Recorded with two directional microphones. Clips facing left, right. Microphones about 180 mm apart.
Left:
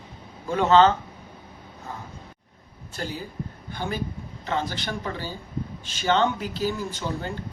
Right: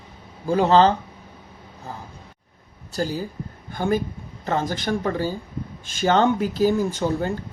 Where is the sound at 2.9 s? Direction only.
40° right (ahead or behind).